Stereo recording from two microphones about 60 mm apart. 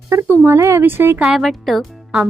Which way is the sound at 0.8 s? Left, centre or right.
Right.